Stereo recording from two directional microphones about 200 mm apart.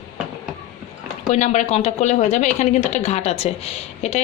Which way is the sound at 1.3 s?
35° left (ahead or behind).